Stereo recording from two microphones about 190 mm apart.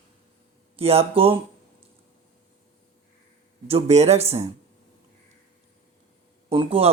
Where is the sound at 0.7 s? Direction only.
30° right (ahead or behind).